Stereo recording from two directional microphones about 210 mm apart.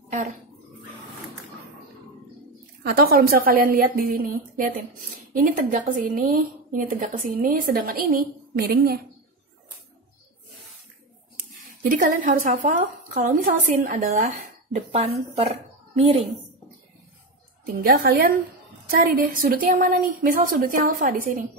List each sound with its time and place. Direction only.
2.8 s a woman's voice: 45° right (ahead or behind)
11.8 s a woman's voice: 40° right (ahead or behind)
17.6 s a woman's voice: 45° right (ahead or behind)